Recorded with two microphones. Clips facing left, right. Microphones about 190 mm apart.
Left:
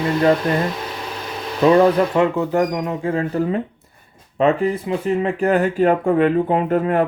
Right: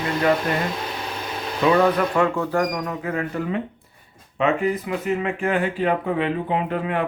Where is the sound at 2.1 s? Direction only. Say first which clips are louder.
Left 3 dB; 20° left (ahead or behind); by 7.0 s 45° left (ahead or behind).